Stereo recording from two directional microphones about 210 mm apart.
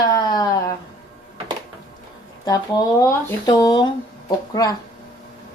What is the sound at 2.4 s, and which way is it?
Speech, 15° left (ahead or behind).